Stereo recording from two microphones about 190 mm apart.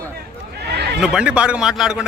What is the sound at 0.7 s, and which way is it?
Neigh, 60° right (ahead or behind).